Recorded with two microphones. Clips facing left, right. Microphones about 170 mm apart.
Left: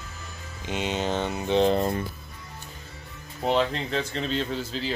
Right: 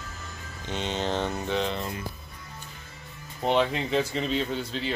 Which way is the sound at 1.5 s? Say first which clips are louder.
Left 12 dB; 40° left (ahead or behind).